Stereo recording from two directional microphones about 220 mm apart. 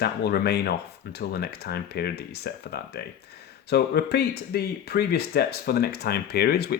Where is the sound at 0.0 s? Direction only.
45° left (ahead or behind).